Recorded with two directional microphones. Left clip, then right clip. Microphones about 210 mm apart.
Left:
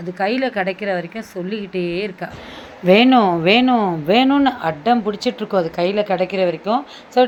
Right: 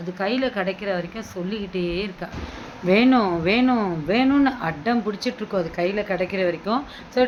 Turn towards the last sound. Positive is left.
turn(degrees=15)  # may be behind; listen again after turning